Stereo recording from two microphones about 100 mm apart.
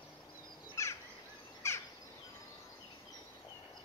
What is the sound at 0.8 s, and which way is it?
Bird, 30° left (ahead or behind).